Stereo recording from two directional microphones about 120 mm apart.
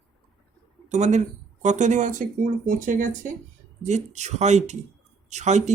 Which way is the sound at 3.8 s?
70° right (ahead or behind).